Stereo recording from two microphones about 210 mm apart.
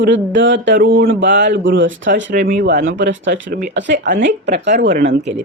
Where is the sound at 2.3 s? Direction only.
45° right (ahead or behind).